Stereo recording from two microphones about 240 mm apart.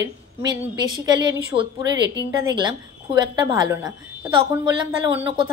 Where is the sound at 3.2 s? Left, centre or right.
Centre.